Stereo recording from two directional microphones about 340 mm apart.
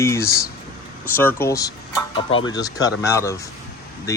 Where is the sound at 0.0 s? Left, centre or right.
Centre.